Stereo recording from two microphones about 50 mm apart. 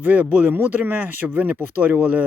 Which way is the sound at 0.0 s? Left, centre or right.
Right.